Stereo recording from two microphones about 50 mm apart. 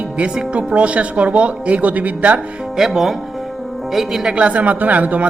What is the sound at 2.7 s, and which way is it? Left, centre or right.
Speech, centre.